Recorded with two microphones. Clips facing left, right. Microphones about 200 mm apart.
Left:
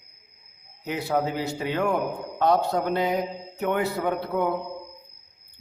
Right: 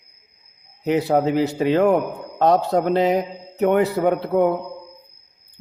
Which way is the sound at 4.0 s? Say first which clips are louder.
Right 8 dB; 45° right (ahead or behind).